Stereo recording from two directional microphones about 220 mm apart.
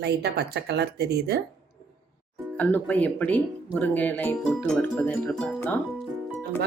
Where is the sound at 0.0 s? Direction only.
50° right (ahead or behind).